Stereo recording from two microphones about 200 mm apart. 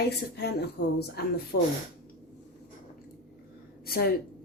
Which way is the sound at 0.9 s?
55° left (ahead or behind).